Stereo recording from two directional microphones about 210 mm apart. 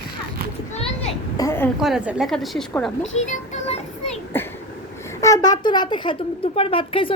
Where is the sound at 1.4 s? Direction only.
10° left (ahead or behind).